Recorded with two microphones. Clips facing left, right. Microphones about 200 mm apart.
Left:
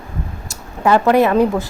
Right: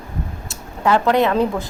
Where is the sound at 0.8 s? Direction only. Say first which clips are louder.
Left 3 dB; 10° left (ahead or behind).